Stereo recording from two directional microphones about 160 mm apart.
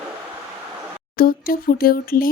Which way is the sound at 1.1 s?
65° left (ahead or behind).